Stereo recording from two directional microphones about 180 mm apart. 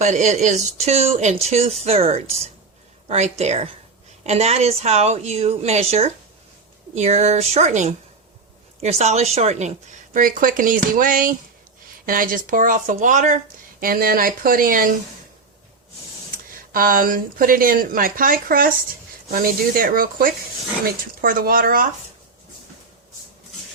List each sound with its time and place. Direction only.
0.0 s a woman's voice: 40° right (ahead or behind)
16.7 s speech: 50° right (ahead or behind)